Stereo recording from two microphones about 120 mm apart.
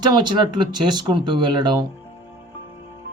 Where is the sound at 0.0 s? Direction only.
35° right (ahead or behind).